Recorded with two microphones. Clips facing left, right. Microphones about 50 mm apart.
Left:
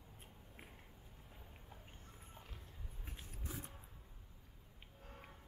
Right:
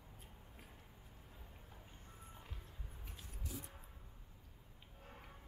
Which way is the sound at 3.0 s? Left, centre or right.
Left.